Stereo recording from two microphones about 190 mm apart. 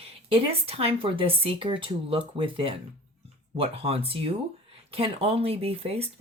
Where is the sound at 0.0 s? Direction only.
30° right (ahead or behind).